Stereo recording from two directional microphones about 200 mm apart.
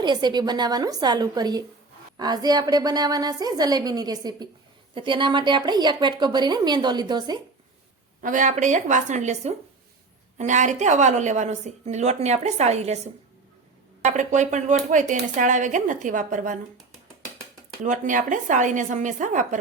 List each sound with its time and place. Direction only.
0.0 s a woman's voice: 20° right (ahead or behind)
8.2 s a woman's voice: 40° right (ahead or behind)
14.0 s a woman's voice: 35° right (ahead or behind)
17.8 s a woman's voice: 40° right (ahead or behind)